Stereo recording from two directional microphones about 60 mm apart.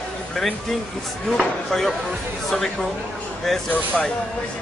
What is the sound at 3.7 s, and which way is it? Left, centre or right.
Speech, left.